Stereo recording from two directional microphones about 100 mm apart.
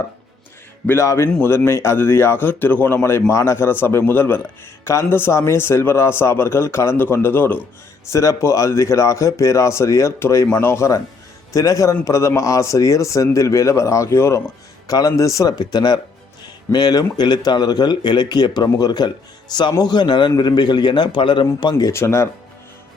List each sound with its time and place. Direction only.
0.9 s speech: 25° left (ahead or behind)
8.1 s speech: 30° left (ahead or behind)
21.9 s speech: 30° left (ahead or behind)